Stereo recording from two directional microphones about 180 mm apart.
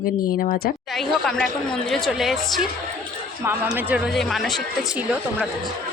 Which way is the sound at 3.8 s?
5° right (ahead or behind).